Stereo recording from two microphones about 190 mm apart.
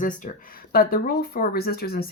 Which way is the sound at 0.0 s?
45° left (ahead or behind).